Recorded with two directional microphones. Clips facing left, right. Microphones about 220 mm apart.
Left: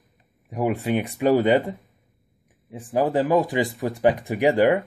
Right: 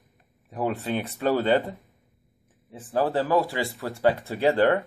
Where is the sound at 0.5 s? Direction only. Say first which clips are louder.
Left 4 dB; 15° left (ahead or behind).